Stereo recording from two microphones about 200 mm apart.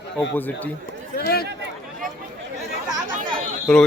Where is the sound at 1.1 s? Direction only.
50° left (ahead or behind).